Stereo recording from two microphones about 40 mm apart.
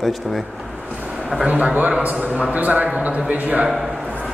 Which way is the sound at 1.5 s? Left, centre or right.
Right.